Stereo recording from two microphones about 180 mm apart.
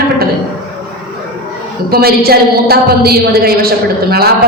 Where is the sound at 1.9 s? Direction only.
55° right (ahead or behind).